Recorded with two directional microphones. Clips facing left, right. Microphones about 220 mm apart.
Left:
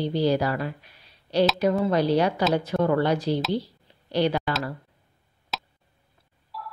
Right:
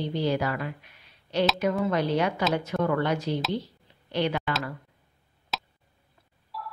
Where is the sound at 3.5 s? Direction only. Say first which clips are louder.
Left 4 dB; 35° left (ahead or behind).